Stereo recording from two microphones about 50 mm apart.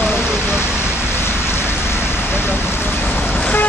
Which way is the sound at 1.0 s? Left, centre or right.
Left.